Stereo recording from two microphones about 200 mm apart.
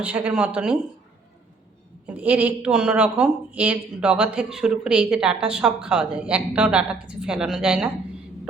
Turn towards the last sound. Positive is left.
turn(degrees=-5)  # may be behind; listen again after turning